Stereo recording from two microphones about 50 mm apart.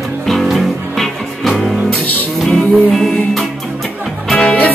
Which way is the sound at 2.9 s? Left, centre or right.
Centre.